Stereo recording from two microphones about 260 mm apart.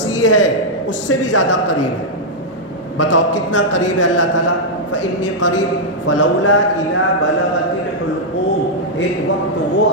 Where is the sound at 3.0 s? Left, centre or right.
Left.